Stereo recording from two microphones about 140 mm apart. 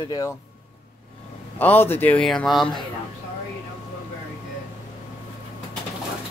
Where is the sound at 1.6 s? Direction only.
15° left (ahead or behind).